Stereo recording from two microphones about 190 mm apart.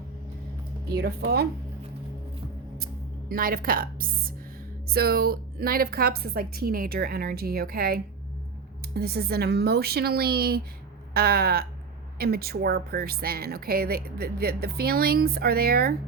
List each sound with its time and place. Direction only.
0.9 s a woman's voice: 55° right (ahead or behind)
2.7 s a woman's voice: 50° right (ahead or behind)